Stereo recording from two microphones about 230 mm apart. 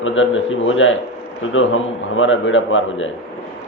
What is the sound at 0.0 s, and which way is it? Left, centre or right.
A man's voice, left.